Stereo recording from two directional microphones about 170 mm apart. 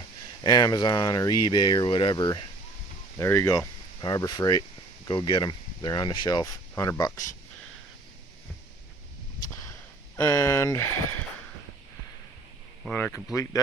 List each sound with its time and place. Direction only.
0.4 s speech: 25° left (ahead or behind)
3.2 s speech: 15° left (ahead or behind)
10.2 s speech: 15° left (ahead or behind)
12.8 s speech: 5° left (ahead or behind)